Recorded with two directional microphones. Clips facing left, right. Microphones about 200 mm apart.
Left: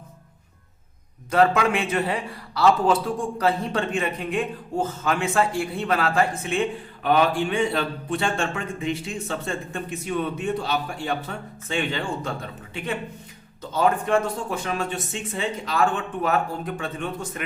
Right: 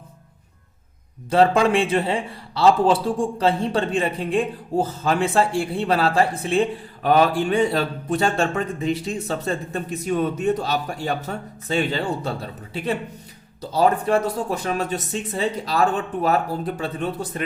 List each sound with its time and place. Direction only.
1.3 s a man's voice: 30° right (ahead or behind)